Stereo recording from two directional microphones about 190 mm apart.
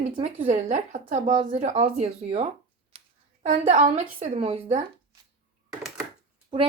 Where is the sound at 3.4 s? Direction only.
35° right (ahead or behind).